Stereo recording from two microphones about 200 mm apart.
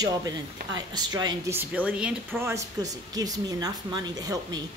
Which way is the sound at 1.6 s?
5° right (ahead or behind).